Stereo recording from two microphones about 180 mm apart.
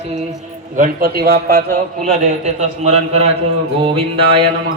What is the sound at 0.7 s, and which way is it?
Mantra, 50° right (ahead or behind).